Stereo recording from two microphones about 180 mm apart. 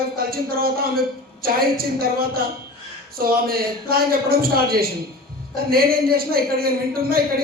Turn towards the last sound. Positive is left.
turn(degrees=-55)  # may be behind; listen again after turning